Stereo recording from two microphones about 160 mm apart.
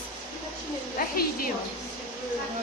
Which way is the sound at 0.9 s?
60° left (ahead or behind).